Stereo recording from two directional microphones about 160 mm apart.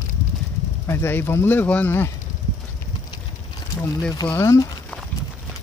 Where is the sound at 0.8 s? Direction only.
15° left (ahead or behind).